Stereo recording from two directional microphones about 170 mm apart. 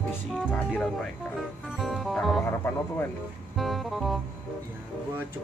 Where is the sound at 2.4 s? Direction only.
15° left (ahead or behind).